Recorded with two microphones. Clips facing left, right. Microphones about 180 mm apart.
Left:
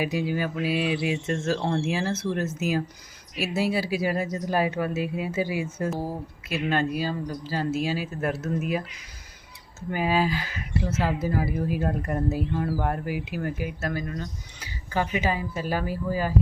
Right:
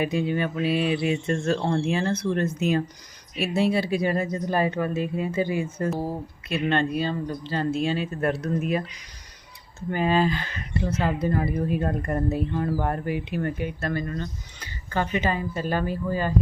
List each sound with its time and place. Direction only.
0.0 s speech: 5° left (ahead or behind)
9.9 s speech: 10° left (ahead or behind)